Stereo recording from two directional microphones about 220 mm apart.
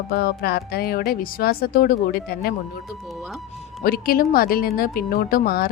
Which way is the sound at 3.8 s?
40° left (ahead or behind).